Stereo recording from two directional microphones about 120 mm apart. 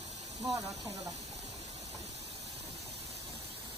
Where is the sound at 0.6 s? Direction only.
30° right (ahead or behind).